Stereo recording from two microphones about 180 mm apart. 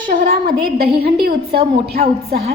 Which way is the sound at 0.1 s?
50° right (ahead or behind).